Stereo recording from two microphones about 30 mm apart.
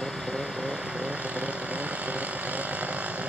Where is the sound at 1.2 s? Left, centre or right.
Right.